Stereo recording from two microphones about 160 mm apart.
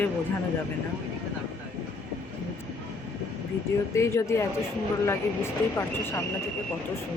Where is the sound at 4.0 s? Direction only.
15° left (ahead or behind).